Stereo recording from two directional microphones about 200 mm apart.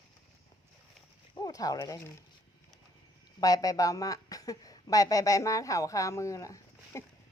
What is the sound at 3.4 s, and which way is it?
Speech, 15° left (ahead or behind).